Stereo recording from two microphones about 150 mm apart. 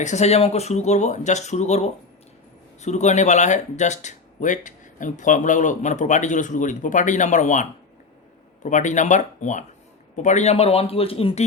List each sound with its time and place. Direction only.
0.0 s speech: 50° left (ahead or behind)